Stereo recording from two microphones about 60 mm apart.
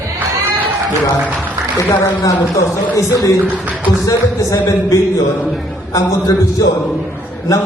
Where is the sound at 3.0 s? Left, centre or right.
Left.